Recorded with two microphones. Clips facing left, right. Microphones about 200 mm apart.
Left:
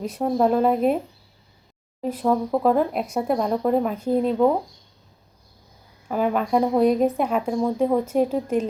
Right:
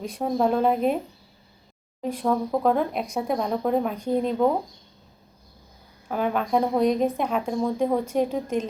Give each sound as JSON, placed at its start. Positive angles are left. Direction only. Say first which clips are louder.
{"t": 0.0, "sound": "speech", "louder": "left 3 dB", "side_deg": 5}
{"t": 2.0, "sound": "speech", "louder": "left 2 dB", "side_deg": 5}
{"t": 6.1, "sound": "speech", "louder": "left 3 dB", "side_deg": 5}